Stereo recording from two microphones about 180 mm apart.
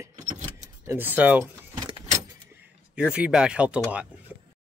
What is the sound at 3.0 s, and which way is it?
Speech, 5° right (ahead or behind).